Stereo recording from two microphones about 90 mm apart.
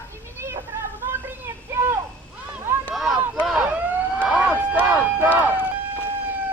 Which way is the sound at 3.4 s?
10° right (ahead or behind).